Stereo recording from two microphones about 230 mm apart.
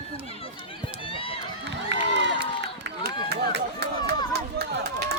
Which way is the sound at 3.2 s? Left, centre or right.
Right.